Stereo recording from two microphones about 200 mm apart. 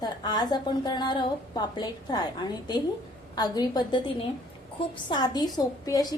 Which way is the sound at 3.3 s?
20° left (ahead or behind).